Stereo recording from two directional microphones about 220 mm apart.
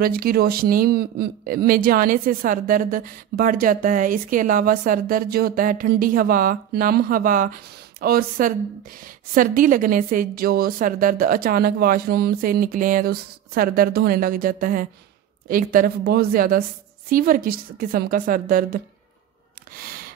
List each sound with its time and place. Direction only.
0.0 s speech: 40° right (ahead or behind)